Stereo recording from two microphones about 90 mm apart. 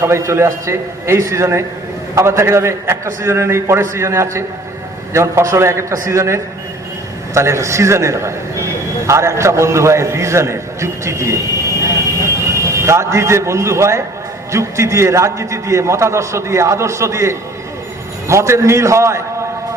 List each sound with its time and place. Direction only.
0.0 s a man's voice: 30° right (ahead or behind)
12.8 s a man's voice: 35° right (ahead or behind)